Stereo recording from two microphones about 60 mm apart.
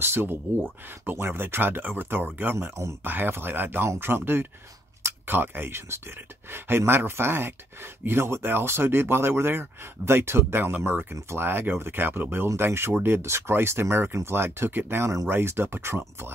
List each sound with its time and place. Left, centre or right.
0.0 s speech: right